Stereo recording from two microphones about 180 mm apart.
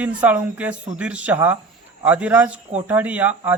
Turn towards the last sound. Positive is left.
turn(degrees=-10)  # may be behind; listen again after turning